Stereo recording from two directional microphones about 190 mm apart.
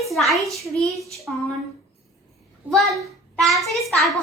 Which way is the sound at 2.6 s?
10° right (ahead or behind).